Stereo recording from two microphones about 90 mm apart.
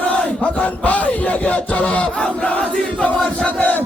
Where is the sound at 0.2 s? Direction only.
10° left (ahead or behind).